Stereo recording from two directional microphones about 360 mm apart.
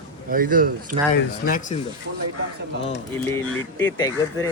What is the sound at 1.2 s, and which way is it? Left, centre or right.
Speech, left.